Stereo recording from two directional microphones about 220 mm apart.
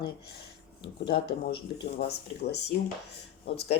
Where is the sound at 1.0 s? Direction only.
45° left (ahead or behind).